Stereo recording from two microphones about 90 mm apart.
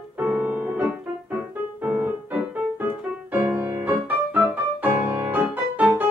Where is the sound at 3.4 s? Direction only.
20° right (ahead or behind).